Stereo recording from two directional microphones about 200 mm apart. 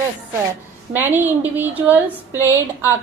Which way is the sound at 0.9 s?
10° right (ahead or behind).